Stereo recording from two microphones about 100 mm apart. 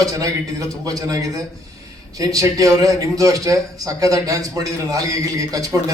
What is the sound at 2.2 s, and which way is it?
A man's voice, 35° right (ahead or behind).